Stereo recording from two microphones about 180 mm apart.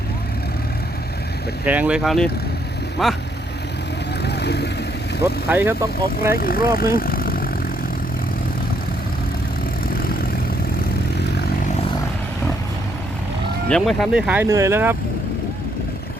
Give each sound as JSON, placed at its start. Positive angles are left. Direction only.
{"t": 1.6, "sound": "speech", "side_deg": -10}
{"t": 4.2, "sound": "vehicle", "side_deg": 65}
{"t": 5.5, "sound": "speech", "side_deg": -10}
{"t": 6.3, "sound": "speech", "side_deg": 55}
{"t": 13.7, "sound": "speech", "side_deg": 5}